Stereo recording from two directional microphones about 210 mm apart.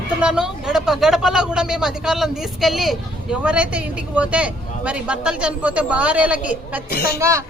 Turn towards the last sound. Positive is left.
turn(degrees=-15)  # may be behind; listen again after turning